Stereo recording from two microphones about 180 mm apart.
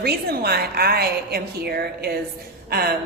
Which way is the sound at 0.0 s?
60° right (ahead or behind).